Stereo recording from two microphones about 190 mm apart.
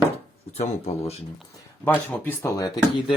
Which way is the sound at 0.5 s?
35° left (ahead or behind).